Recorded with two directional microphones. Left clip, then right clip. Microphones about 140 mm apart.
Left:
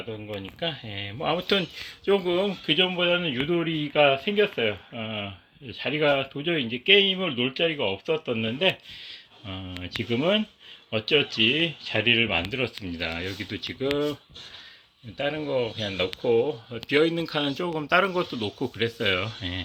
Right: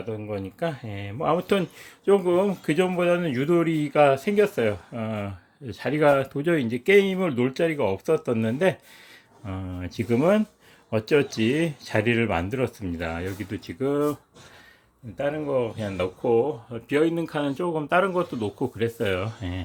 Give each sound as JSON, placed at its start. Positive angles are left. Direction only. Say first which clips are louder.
{"t": 0.2, "sound": "speech", "louder": "right 3 dB", "side_deg": -25}
{"t": 2.5, "sound": "speech", "louder": "left 1 dB", "side_deg": -30}
{"t": 4.9, "sound": "speech", "louder": "right 1 dB", "side_deg": -65}
{"t": 5.8, "sound": "speech", "louder": "right 3 dB", "side_deg": -35}
{"t": 7.9, "sound": "speech", "louder": "right 3 dB", "side_deg": -30}
{"t": 10.0, "sound": "speech", "louder": "right 3 dB", "side_deg": -20}
{"t": 15.2, "sound": "speech", "louder": "right 1 dB", "side_deg": 0}